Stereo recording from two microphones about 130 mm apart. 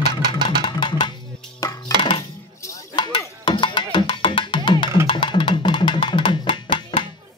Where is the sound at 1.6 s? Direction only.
30° left (ahead or behind).